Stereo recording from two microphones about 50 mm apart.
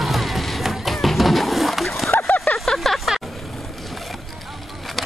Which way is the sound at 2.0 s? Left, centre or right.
Left.